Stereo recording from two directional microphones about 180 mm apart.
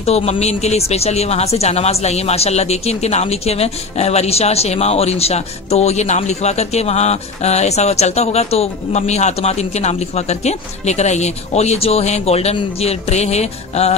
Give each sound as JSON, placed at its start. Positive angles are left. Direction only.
{"t": 0.0, "sound": "speech", "side_deg": 35}